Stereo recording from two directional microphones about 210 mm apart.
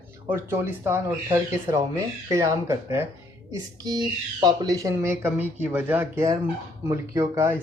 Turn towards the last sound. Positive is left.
turn(degrees=-15)  # may be behind; listen again after turning